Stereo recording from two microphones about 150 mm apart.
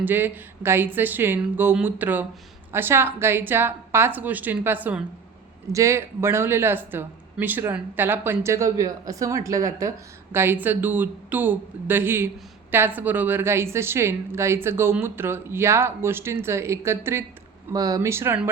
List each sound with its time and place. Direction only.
0.0 s a woman's voice: 15° right (ahead or behind)